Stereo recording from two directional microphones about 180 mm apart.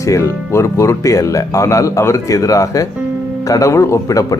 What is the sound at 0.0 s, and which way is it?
A man's voice, 15° left (ahead or behind).